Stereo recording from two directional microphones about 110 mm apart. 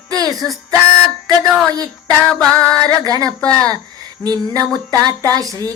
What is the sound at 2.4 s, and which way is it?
Music, 5° left (ahead or behind).